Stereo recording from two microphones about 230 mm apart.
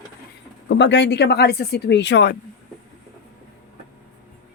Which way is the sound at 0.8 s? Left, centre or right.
Left.